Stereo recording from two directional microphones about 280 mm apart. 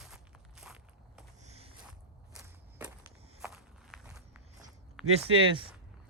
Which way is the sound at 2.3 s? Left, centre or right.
Centre.